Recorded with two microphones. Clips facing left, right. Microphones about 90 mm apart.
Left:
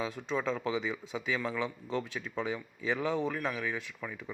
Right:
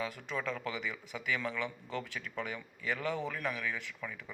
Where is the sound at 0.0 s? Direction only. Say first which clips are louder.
Left 4 dB; 20° left (ahead or behind).